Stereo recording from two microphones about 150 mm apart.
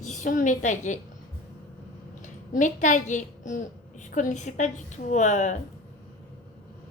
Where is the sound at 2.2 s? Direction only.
55° left (ahead or behind).